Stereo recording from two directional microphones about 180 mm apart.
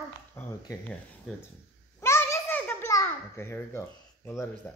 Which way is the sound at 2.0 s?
15° left (ahead or behind).